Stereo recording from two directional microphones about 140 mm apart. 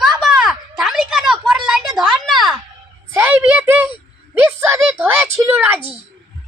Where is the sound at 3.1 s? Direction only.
15° right (ahead or behind).